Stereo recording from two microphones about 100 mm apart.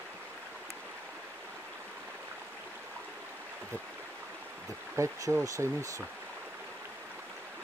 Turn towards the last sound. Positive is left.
turn(degrees=-30)  # may be behind; listen again after turning